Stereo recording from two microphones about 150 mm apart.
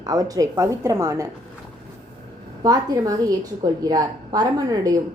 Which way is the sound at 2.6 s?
25° right (ahead or behind).